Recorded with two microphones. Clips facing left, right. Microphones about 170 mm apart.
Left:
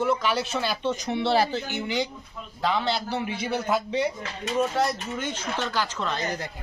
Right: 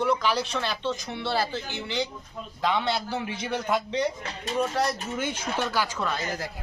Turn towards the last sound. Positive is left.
turn(degrees=-10)  # may be behind; listen again after turning